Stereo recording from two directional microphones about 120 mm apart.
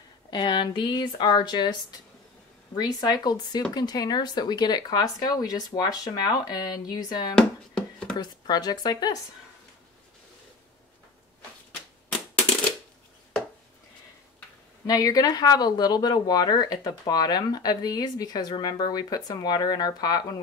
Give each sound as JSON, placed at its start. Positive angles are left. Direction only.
{"t": 0.3, "sound": "speech", "side_deg": 40}
{"t": 14.9, "sound": "speech", "side_deg": 30}